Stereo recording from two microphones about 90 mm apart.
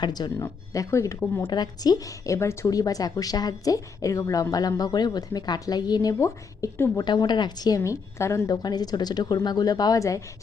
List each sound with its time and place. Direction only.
0.0 s a woman's voice: 50° left (ahead or behind)
0.7 s a woman's voice: 35° left (ahead or behind)
1.5 s a woman's voice: 50° left (ahead or behind); by 2.6 s 30° left (ahead or behind)
2.6 s a woman's voice: 40° left (ahead or behind)
6.9 s a woman's voice: 50° left (ahead or behind)
7.9 s a woman's voice: 35° left (ahead or behind)